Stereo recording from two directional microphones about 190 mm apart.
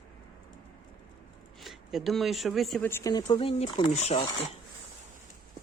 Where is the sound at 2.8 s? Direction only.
15° left (ahead or behind); by 4.3 s 30° left (ahead or behind).